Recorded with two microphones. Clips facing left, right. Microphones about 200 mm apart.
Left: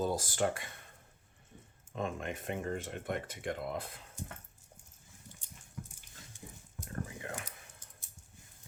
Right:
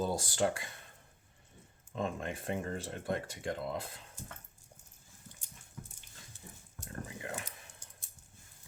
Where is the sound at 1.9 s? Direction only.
30° right (ahead or behind).